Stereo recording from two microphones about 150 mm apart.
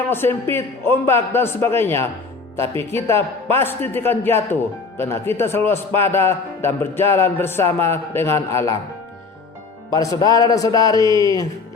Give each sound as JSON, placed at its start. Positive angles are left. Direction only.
{"t": 0.1, "sound": "a man's voice", "side_deg": 15}
{"t": 9.9, "sound": "a man's voice", "side_deg": 25}